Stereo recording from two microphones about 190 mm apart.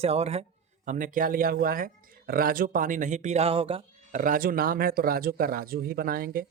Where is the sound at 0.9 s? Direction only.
45° right (ahead or behind).